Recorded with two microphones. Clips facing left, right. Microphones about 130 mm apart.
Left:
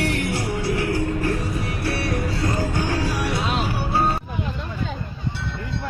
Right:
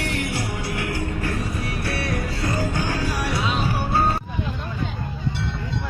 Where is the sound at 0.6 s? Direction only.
30° left (ahead or behind).